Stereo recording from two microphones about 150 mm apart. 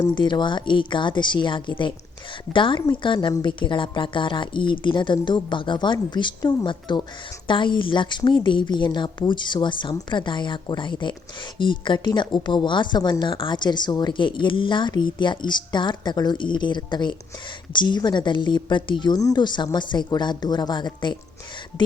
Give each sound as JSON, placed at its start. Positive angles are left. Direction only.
{"t": 0.1, "sound": "a woman's voice", "side_deg": 30}